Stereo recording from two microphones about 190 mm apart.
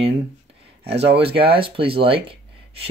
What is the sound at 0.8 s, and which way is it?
Speech, 60° right (ahead or behind).